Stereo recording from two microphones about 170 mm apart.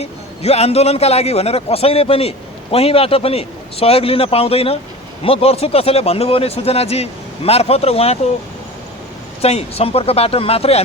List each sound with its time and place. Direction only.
0.0 s speech: 35° left (ahead or behind)
9.4 s speech: 35° left (ahead or behind)